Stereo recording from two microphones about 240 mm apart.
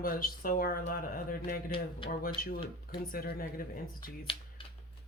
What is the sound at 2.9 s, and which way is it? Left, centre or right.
Speech, left.